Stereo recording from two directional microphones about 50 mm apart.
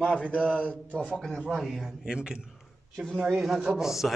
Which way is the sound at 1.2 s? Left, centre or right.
Centre.